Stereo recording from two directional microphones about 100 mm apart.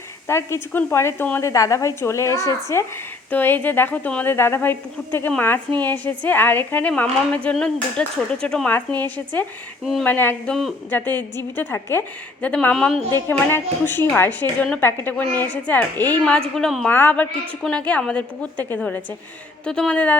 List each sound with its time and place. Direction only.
0.3 s a woman's voice: 25° left (ahead or behind)
10.5 s speech: centre (ahead or behind)
10.9 s a woman's voice: 20° left (ahead or behind)
13.1 s a woman's voice: 25° left (ahead or behind); by 16.9 s 5° left (ahead or behind)
16.9 s a woman's voice: 20° left (ahead or behind)
19.6 s a woman's voice: 10° left (ahead or behind)